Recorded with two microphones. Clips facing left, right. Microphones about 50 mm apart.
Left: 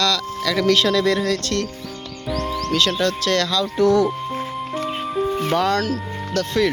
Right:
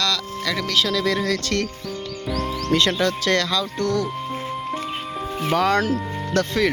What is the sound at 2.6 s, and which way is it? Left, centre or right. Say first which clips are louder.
Speech: right 1 dB; right.